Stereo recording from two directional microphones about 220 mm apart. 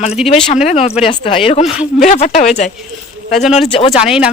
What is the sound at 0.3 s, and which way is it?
Speech, 25° left (ahead or behind).